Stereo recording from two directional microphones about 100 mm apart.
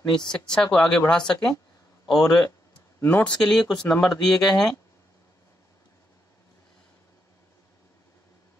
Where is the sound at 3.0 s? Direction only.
20° left (ahead or behind).